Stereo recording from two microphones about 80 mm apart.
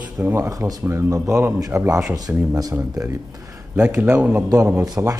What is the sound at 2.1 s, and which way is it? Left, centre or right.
Speech, right.